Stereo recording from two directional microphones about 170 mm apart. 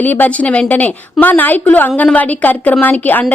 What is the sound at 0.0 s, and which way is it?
A woman's voice, 10° left (ahead or behind).